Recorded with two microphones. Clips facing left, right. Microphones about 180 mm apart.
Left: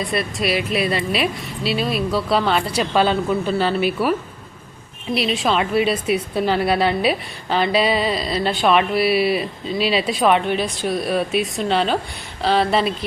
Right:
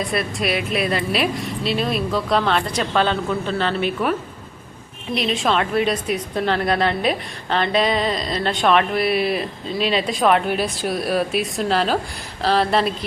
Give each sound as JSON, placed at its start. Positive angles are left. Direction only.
{"t": 0.1, "sound": "a woman's voice", "side_deg": 0}
{"t": 5.1, "sound": "a woman's voice", "side_deg": 5}